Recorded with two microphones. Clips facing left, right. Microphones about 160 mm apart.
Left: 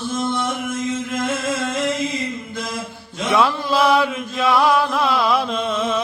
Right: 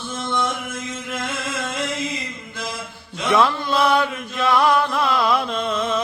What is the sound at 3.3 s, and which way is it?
Chant, centre (ahead or behind).